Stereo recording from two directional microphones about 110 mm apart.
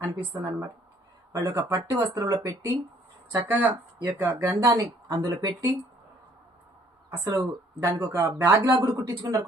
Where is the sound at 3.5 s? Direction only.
15° right (ahead or behind).